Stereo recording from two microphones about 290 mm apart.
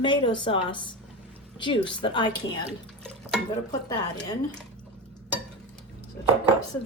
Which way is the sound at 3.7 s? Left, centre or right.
Centre.